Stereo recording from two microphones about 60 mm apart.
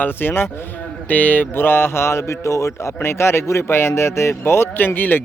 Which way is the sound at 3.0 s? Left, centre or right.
Left.